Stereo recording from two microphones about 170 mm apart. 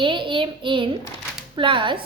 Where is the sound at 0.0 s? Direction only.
30° right (ahead or behind).